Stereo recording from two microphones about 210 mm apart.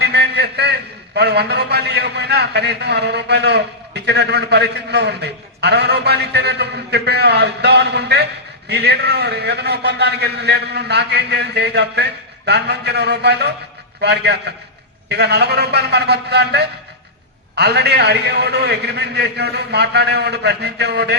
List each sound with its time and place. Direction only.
0.0 s a man's voice: 50° right (ahead or behind)